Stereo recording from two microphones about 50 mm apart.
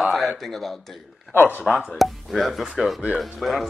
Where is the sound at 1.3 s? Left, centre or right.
Left.